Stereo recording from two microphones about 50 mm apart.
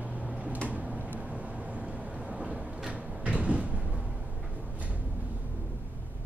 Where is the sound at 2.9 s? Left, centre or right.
Right.